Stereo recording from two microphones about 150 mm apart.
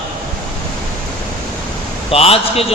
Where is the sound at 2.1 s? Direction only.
40° left (ahead or behind).